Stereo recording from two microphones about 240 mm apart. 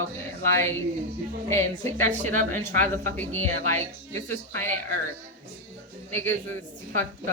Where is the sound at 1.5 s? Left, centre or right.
Centre.